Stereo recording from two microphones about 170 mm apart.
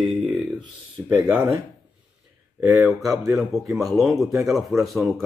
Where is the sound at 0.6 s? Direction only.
25° right (ahead or behind).